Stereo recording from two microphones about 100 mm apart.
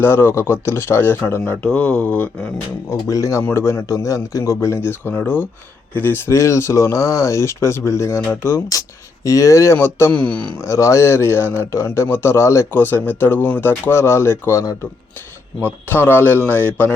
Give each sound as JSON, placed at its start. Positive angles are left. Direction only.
{"t": 0.0, "sound": "speech", "side_deg": 25}
{"t": 2.9, "sound": "speech", "side_deg": 30}
{"t": 10.1, "sound": "speech", "side_deg": 10}
{"t": 10.6, "sound": "speech", "side_deg": 30}